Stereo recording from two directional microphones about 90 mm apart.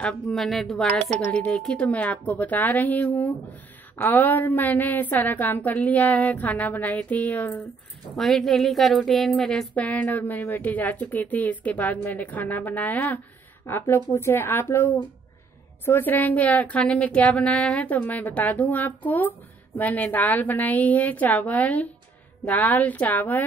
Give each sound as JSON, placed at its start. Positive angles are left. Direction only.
{"t": 0.3, "sound": "a woman's voice", "side_deg": 0}
{"t": 1.2, "sound": "a woman's voice", "side_deg": 15}
{"t": 8.2, "sound": "a woman's voice", "side_deg": 5}
{"t": 9.8, "sound": "a woman's voice", "side_deg": 20}